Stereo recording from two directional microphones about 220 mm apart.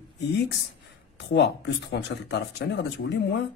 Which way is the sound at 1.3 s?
50° left (ahead or behind).